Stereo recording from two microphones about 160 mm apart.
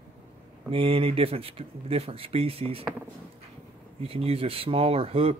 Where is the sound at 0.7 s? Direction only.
35° right (ahead or behind).